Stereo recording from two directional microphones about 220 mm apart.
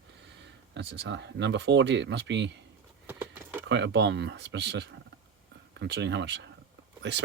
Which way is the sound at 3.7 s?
50° right (ahead or behind).